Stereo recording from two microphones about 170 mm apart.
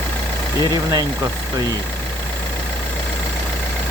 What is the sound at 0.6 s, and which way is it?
Speech, 25° right (ahead or behind).